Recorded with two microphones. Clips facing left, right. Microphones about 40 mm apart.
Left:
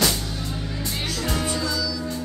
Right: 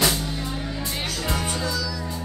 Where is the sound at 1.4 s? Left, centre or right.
Right.